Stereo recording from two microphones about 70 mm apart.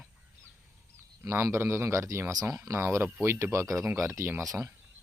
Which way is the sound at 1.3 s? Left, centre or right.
Right.